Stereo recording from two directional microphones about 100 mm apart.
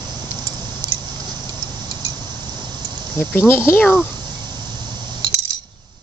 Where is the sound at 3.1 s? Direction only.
20° left (ahead or behind).